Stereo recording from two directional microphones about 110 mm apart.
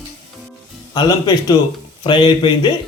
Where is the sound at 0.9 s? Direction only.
40° left (ahead or behind).